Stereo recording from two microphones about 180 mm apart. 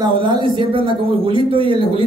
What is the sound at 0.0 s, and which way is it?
A man's voice, 25° right (ahead or behind).